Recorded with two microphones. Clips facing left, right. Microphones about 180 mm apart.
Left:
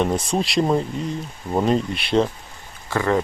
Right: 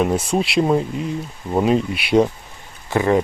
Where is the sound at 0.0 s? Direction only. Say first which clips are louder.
Right 2 dB; 5° right (ahead or behind).